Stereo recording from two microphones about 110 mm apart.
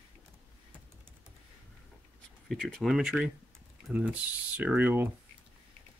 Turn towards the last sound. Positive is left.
turn(degrees=-15)  # may be behind; listen again after turning